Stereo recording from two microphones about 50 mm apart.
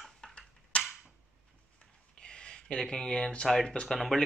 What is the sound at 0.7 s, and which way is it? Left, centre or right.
Cap gun, left.